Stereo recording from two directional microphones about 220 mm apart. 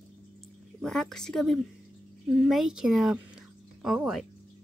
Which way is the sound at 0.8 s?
Centre (ahead or behind).